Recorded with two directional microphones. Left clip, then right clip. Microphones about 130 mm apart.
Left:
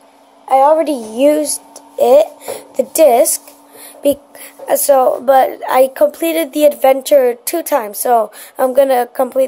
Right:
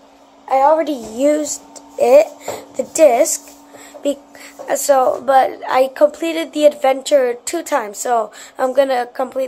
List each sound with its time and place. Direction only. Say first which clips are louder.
0.5 s a woman's voice: left 3 dB; 70° left (ahead or behind)
0.9 s a woman's voice: left 4 dB; 40° left (ahead or behind)